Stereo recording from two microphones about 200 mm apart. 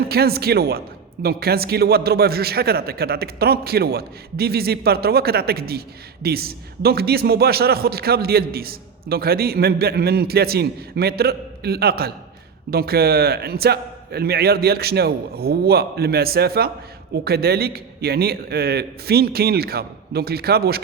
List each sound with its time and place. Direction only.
0.1 s a man's voice: 50° right (ahead or behind)